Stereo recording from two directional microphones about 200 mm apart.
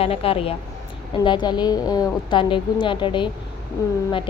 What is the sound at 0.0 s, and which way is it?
Speech, 30° left (ahead or behind).